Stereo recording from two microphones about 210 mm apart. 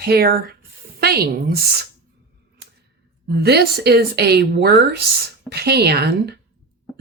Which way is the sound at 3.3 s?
50° right (ahead or behind).